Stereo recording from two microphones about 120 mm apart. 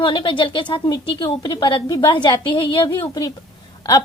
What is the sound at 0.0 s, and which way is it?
A woman's voice, 45° left (ahead or behind).